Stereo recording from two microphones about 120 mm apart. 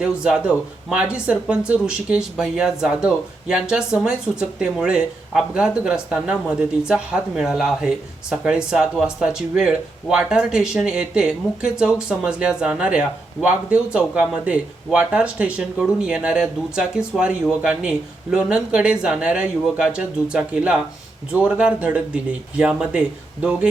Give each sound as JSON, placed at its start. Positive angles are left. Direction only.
{"t": 0.0, "sound": "speech", "side_deg": -5}